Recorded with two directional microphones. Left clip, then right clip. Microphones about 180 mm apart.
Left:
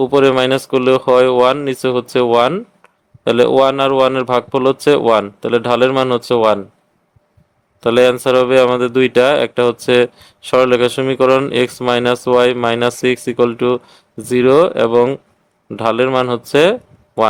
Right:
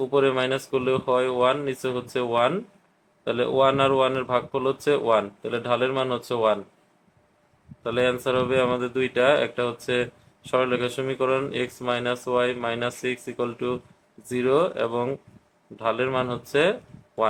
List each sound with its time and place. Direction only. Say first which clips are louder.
0.0 s speech: left 10 dB; 60° left (ahead or behind)
7.9 s speech: left 12 dB; 65° left (ahead or behind)